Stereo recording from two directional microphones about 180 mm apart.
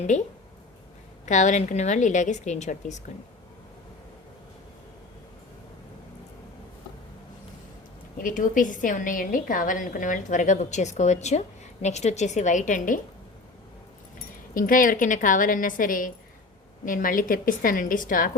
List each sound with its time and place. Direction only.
0.1 s a woman's voice: 40° left (ahead or behind)
8.2 s a woman's voice: 50° left (ahead or behind)
14.5 s a woman's voice: 50° left (ahead or behind)